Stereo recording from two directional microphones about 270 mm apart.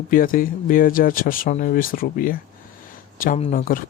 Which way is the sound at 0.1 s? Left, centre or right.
Left.